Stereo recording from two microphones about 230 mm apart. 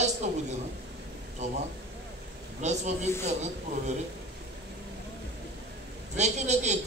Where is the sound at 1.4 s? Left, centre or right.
Right.